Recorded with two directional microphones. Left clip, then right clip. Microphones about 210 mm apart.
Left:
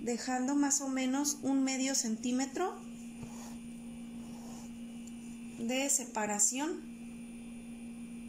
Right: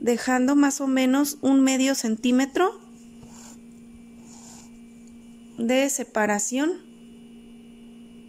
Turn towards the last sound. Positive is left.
turn(degrees=-40)  # may be behind; listen again after turning